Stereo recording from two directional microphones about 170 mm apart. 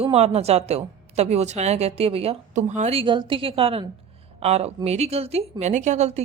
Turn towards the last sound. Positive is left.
turn(degrees=-40)  # may be behind; listen again after turning